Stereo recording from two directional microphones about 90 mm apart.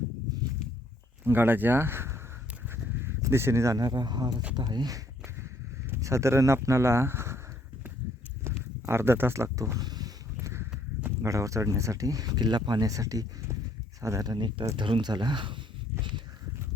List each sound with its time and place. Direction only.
1.2 s speech: 25° right (ahead or behind)
2.6 s goose: 25° right (ahead or behind)
3.2 s speech: 30° right (ahead or behind); by 4.9 s 50° right (ahead or behind)
5.9 s speech: 35° right (ahead or behind)
8.4 s speech: 30° right (ahead or behind)
9.7 s a sound: 45° right (ahead or behind)
10.4 s walk: 30° right (ahead or behind)
11.3 s speech: 35° right (ahead or behind)
14.3 s speech: 55° right (ahead or behind)